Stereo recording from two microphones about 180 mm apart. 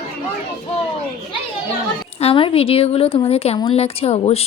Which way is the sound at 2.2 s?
30° left (ahead or behind).